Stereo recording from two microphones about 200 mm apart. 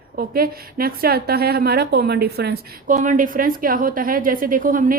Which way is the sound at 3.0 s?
40° right (ahead or behind).